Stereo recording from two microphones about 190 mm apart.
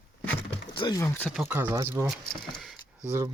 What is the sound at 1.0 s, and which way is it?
Speech, 10° left (ahead or behind).